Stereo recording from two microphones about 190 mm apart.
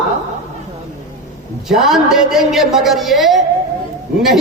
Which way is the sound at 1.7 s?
Centre (ahead or behind).